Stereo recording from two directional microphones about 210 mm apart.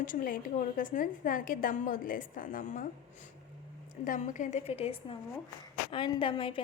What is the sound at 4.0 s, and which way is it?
A woman's voice, 35° left (ahead or behind).